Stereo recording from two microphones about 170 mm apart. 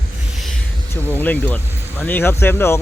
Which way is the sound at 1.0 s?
10° left (ahead or behind).